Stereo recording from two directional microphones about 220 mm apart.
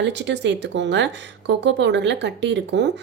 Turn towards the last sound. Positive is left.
turn(degrees=-50)  # may be behind; listen again after turning